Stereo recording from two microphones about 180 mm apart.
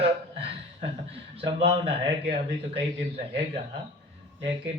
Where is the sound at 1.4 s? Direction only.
30° right (ahead or behind).